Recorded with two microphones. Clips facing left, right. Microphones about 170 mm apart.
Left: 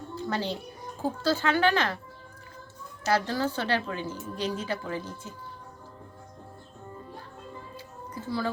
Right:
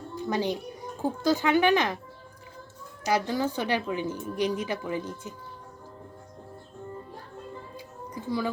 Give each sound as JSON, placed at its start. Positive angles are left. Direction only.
{"t": 0.2, "sound": "speech", "side_deg": -15}
{"t": 3.0, "sound": "speech", "side_deg": -15}
{"t": 7.8, "sound": "music", "side_deg": -15}